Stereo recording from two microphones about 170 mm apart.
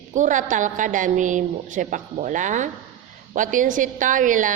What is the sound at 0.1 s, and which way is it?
A woman's voice, 50° right (ahead or behind).